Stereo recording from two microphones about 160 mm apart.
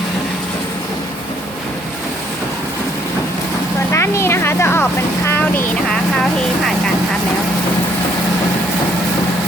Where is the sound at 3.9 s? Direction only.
15° left (ahead or behind).